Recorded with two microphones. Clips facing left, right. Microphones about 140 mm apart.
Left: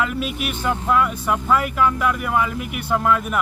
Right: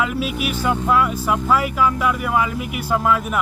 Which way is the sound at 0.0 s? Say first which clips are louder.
Right 2 dB; 5° right (ahead or behind).